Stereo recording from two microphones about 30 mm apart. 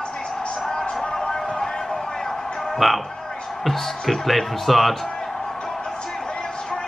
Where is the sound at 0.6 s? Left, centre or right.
Left.